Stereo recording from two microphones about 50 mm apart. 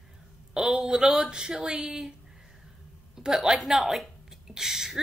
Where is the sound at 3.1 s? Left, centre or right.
Centre.